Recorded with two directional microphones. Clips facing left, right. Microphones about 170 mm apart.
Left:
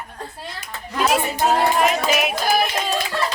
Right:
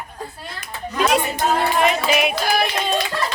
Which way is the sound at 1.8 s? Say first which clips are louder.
Right 1 dB; centre (ahead or behind).